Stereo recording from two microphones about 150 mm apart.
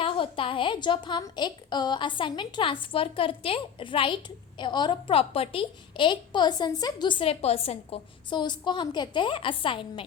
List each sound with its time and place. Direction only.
0.0 s a woman's voice: 35° left (ahead or behind)